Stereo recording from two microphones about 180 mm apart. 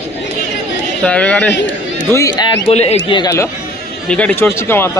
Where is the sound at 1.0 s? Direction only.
5° left (ahead or behind).